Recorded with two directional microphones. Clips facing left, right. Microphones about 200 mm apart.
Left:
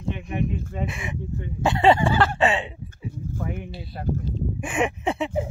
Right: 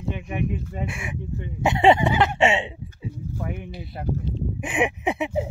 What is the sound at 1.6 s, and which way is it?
Speech, 20° right (ahead or behind).